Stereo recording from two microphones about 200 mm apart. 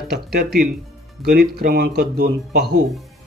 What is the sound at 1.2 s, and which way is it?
A man's voice, 50° right (ahead or behind).